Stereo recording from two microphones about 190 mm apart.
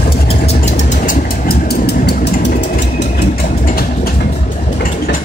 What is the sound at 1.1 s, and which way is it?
Vehicle, 55° left (ahead or behind).